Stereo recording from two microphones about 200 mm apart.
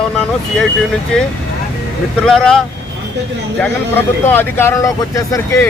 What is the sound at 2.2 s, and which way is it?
Speech, 5° left (ahead or behind).